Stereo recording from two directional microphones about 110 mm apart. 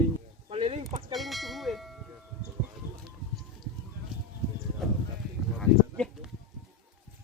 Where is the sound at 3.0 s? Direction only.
Centre (ahead or behind).